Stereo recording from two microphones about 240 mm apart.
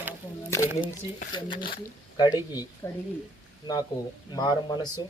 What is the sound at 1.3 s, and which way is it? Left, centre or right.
Speech, centre.